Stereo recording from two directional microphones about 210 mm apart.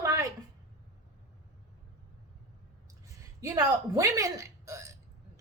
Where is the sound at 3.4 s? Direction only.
15° right (ahead or behind).